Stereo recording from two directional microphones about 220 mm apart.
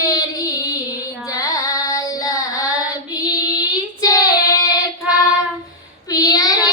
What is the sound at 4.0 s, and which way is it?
Child singing, 15° left (ahead or behind).